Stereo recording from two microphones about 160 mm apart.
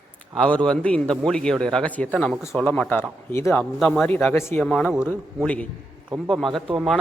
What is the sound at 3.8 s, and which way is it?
Speech, 5° left (ahead or behind).